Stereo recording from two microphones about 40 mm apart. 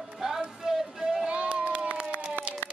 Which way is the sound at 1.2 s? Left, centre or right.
Right.